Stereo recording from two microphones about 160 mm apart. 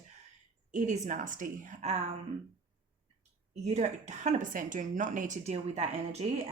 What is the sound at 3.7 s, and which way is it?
A woman's voice, 45° right (ahead or behind).